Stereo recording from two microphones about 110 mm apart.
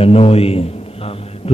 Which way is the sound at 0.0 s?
65° left (ahead or behind).